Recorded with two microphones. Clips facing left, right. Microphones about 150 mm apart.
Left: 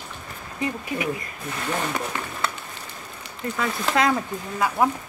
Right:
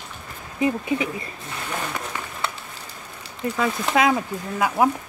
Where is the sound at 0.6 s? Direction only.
25° right (ahead or behind).